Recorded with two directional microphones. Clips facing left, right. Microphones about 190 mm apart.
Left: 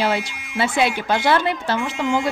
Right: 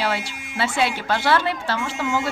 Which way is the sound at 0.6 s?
15° left (ahead or behind).